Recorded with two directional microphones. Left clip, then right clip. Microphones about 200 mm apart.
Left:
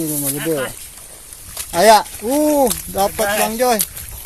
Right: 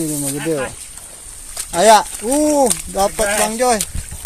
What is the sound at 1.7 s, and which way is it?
Speech, 5° left (ahead or behind).